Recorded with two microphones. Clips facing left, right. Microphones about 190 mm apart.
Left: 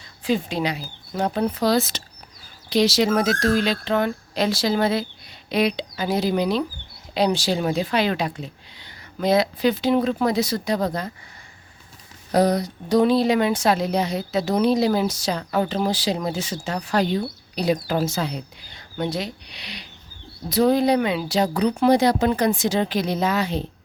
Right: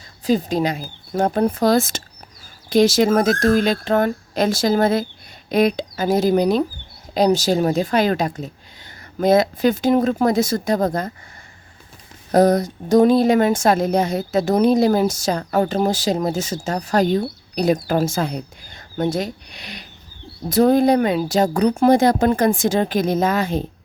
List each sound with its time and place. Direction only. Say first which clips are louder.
0.3 s speech: right 4 dB; 40° right (ahead or behind)
12.3 s speech: right 4 dB; 50° right (ahead or behind)